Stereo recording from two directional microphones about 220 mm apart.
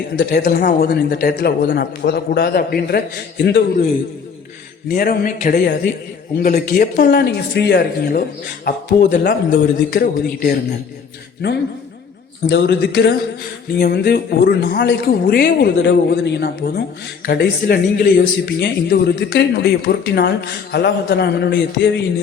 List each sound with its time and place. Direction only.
0.2 s speech: 45° left (ahead or behind)
4.9 s speech: 40° left (ahead or behind)